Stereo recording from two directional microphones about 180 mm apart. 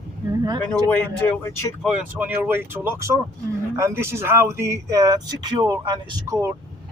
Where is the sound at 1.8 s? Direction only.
5° right (ahead or behind).